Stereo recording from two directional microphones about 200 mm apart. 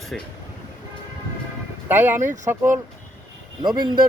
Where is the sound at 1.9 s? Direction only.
10° right (ahead or behind).